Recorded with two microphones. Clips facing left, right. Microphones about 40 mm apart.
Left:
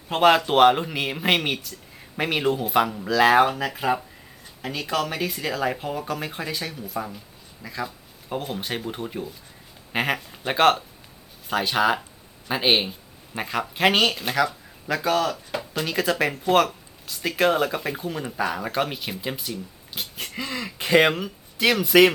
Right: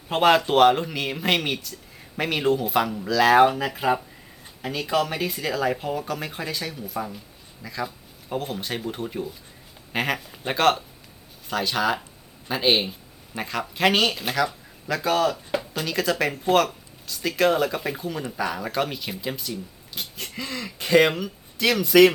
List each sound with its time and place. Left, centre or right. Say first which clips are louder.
0.1 s speech: even; centre
3.4 s speech: right 3 dB; centre
15.8 s speech: left 2 dB; centre